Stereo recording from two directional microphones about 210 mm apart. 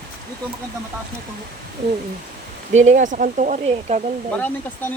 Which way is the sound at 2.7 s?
35° right (ahead or behind).